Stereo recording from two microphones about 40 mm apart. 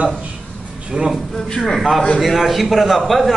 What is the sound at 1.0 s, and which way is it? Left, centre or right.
Speech, right.